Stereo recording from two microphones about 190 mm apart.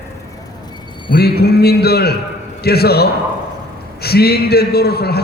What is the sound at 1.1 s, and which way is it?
A man's voice, 55° left (ahead or behind).